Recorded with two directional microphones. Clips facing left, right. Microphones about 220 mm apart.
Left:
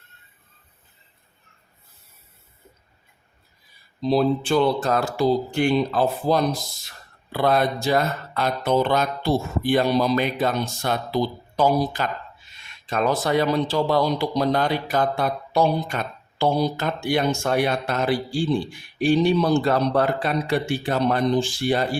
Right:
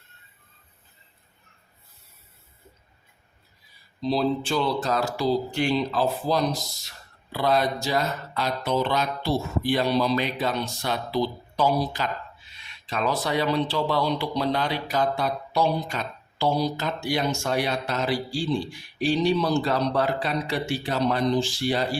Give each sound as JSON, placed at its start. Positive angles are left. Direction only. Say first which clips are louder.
{"t": 4.0, "sound": "speech", "louder": "left 4 dB", "side_deg": 50}